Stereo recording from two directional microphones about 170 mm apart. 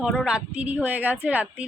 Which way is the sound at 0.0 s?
5° right (ahead or behind).